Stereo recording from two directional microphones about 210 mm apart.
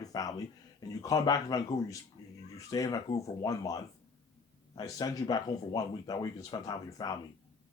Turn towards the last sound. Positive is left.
turn(degrees=20)  # may be behind; listen again after turning